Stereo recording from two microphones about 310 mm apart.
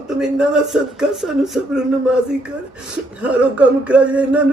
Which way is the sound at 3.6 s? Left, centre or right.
Centre.